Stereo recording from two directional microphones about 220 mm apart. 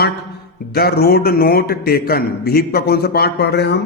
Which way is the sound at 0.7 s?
45° left (ahead or behind).